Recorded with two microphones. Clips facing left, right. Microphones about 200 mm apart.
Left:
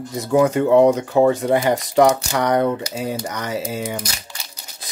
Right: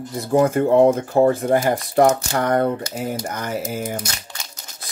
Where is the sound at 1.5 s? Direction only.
80° left.